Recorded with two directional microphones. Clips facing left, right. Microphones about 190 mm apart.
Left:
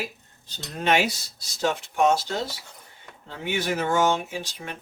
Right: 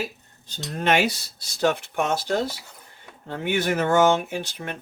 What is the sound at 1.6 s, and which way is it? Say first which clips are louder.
Speech: even; 55° right (ahead or behind).